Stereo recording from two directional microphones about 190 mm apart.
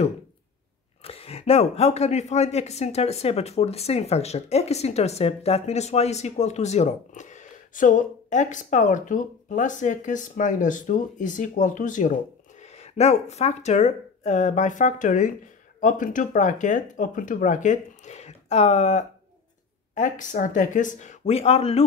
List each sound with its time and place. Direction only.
1.0 s a man's voice: 30° left (ahead or behind)